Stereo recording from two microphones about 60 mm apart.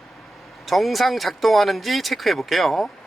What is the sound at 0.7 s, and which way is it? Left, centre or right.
Speech, centre.